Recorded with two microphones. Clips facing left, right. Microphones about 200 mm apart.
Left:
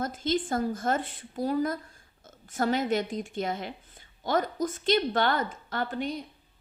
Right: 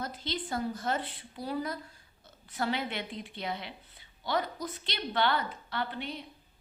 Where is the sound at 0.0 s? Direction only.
50° left (ahead or behind).